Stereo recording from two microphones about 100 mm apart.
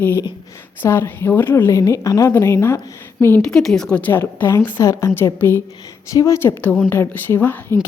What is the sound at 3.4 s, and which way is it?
A woman's voice, 5° left (ahead or behind).